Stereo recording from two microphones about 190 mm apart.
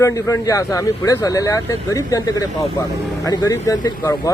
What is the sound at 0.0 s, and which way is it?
Speech, 15° left (ahead or behind).